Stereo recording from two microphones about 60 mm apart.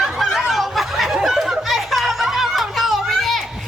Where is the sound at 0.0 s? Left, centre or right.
Centre.